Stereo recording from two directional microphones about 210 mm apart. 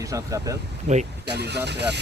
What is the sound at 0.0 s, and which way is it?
Speech, 15° right (ahead or behind).